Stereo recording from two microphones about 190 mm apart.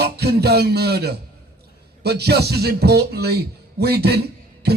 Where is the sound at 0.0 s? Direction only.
55° right (ahead or behind).